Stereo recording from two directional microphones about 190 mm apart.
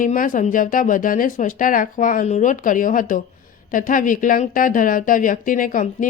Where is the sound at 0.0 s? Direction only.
45° left (ahead or behind).